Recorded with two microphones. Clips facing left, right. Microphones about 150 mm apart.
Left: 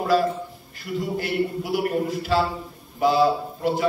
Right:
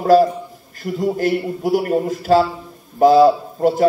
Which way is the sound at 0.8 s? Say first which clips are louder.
Right 8 dB; 45° right (ahead or behind).